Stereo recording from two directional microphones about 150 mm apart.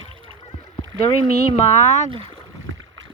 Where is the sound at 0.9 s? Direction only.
30° left (ahead or behind).